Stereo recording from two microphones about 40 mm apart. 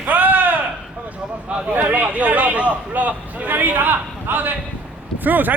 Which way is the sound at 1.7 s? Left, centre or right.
Right.